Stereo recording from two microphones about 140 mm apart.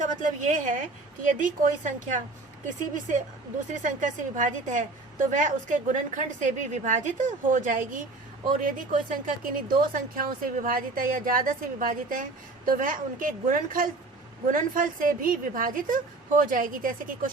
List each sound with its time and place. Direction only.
0.0 s a woman's voice: 60° right (ahead or behind); by 17.2 s 75° right (ahead or behind)